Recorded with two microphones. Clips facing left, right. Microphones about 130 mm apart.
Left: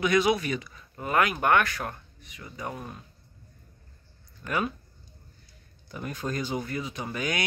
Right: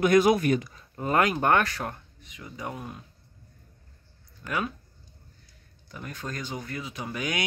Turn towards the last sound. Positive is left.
turn(degrees=-10)  # may be behind; listen again after turning